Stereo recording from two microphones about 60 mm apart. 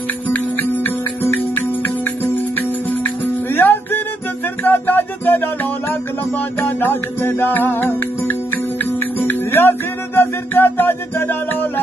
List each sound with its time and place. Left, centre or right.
0.3 s music: left
2.3 s music: left